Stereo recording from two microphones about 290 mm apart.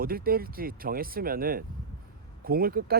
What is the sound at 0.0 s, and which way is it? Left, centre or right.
Speech, right.